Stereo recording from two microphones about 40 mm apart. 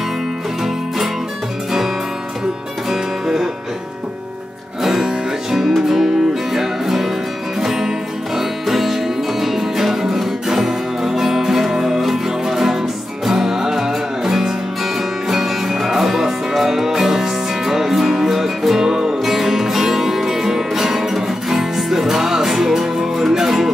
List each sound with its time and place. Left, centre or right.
0.7 s music: centre
2.9 s music: centre
4.8 s music: centre
18.9 s music: centre
19.2 s music: centre